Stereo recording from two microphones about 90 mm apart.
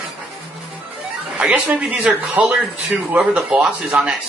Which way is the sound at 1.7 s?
15° right (ahead or behind).